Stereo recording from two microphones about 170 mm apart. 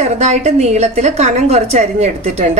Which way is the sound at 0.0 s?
40° right (ahead or behind).